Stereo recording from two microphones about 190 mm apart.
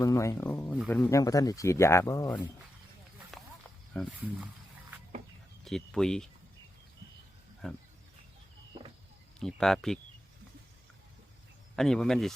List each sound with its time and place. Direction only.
0.0 s speech: 15° left (ahead or behind)
1.1 s speech: 20° left (ahead or behind)
3.3 s snake: centre (ahead or behind)
3.9 s speech: 5° left (ahead or behind)
5.6 s speech: centre (ahead or behind)
9.4 s speech: centre (ahead or behind)
11.8 s speech: 5° left (ahead or behind)